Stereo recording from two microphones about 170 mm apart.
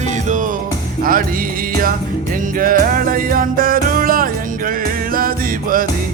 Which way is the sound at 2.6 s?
55° right (ahead or behind).